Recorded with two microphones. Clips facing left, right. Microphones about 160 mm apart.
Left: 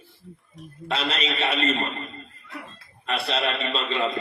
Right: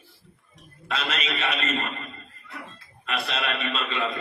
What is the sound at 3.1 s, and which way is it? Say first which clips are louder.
A man's voice: left 3 dB; 30° left (ahead or behind).